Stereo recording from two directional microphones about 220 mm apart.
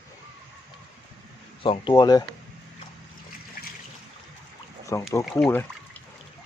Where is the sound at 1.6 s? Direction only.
25° left (ahead or behind).